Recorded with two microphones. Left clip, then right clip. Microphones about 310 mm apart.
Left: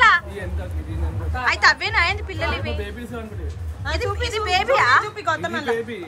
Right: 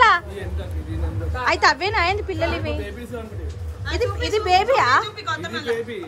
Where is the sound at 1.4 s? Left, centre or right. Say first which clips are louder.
Left 1 dB; centre.